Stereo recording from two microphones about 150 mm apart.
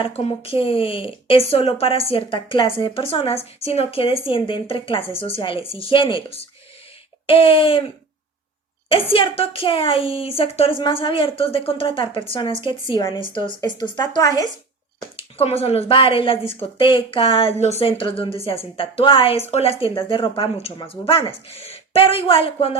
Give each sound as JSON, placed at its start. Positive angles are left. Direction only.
{"t": 0.0, "sound": "speech", "side_deg": 40}
{"t": 8.9, "sound": "speech", "side_deg": 40}
{"t": 15.1, "sound": "speech", "side_deg": 40}